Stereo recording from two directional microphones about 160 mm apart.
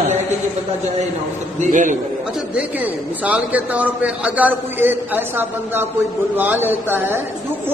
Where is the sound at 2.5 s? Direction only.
10° right (ahead or behind).